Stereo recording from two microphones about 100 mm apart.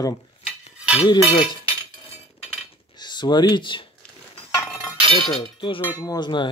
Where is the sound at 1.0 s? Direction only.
50° left (ahead or behind).